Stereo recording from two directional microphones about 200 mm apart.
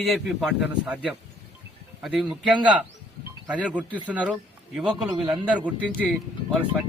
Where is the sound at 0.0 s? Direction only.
Centre (ahead or behind).